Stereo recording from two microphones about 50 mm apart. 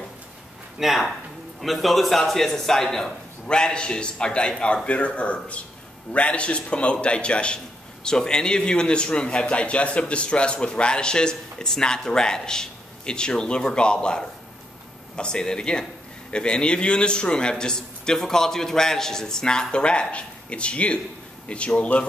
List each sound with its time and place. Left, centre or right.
0.7 s a man's voice: centre; by 22.0 s left